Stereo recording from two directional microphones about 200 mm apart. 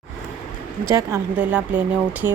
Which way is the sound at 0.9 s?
15° right (ahead or behind).